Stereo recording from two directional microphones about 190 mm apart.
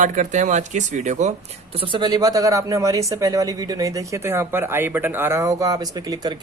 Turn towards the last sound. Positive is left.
turn(degrees=-20)  # may be behind; listen again after turning